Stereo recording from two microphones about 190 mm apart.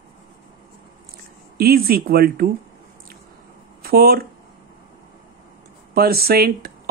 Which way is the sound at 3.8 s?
55° right (ahead or behind).